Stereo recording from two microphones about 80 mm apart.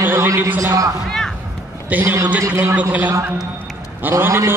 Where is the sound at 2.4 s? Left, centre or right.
Right.